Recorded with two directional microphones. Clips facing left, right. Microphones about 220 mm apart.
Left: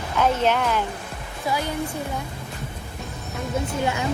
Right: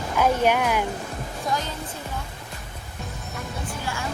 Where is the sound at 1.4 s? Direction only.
10° left (ahead or behind).